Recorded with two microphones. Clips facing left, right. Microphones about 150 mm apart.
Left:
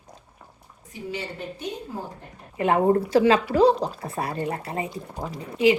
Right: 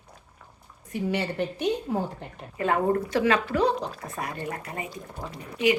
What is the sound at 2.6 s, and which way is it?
A woman's voice, 20° left (ahead or behind).